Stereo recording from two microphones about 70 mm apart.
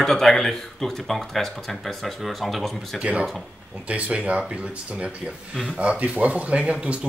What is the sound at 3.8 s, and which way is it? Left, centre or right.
Speech, centre.